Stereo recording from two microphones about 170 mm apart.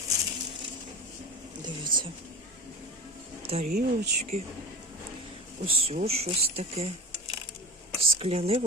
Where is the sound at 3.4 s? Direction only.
35° right (ahead or behind).